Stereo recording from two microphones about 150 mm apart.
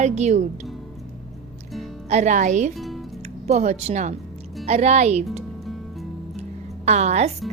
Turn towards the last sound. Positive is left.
turn(degrees=-50)  # may be behind; listen again after turning